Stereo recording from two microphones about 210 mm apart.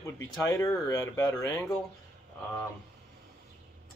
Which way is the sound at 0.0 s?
15° left (ahead or behind).